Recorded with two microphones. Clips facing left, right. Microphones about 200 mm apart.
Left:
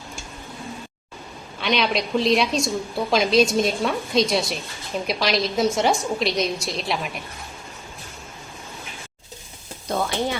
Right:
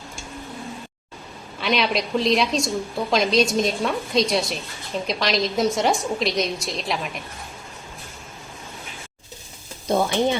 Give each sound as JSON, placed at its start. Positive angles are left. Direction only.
{"t": 1.6, "sound": "a woman's voice", "side_deg": 0}
{"t": 9.9, "sound": "stir", "side_deg": -20}